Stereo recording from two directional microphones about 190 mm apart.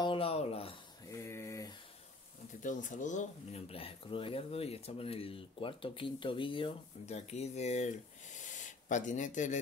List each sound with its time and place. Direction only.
0.0 s a sound: 30° left (ahead or behind)
1.1 s mantra: 15° left (ahead or behind)
2.6 s speech: 40° left (ahead or behind)